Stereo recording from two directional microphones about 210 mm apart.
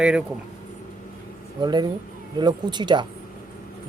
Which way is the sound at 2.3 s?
20° right (ahead or behind).